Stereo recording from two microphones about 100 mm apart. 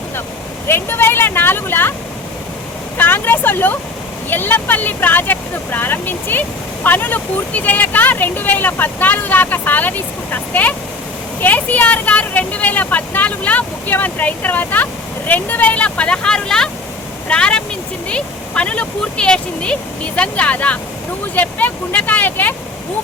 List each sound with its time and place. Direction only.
0.7 s speech: 25° left (ahead or behind)
3.0 s vehicle: 20° left (ahead or behind)
4.3 s speech: 20° left (ahead or behind)